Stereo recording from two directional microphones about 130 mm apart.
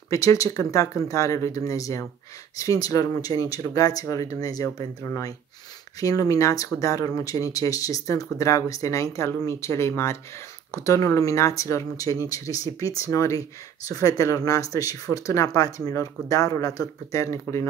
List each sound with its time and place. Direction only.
0.1 s speech: 25° left (ahead or behind)